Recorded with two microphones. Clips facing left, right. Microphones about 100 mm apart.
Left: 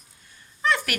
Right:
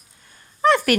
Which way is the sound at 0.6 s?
45° right (ahead or behind).